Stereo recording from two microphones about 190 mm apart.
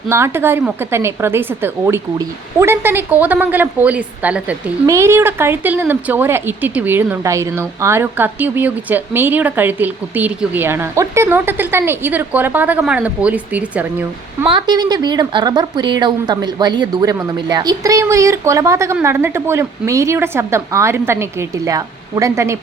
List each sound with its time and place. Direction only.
0.1 s a woman's voice: 15° right (ahead or behind)
14.4 s a woman's voice: 25° right (ahead or behind)